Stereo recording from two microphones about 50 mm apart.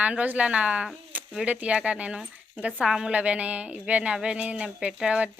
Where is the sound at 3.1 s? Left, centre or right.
Right.